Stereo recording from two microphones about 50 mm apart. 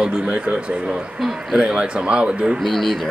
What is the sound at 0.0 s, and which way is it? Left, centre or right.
Speech, centre.